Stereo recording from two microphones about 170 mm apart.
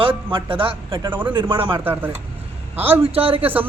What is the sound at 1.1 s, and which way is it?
A woman's voice, 10° right (ahead or behind).